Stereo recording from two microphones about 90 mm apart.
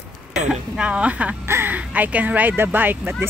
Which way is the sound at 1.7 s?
15° right (ahead or behind).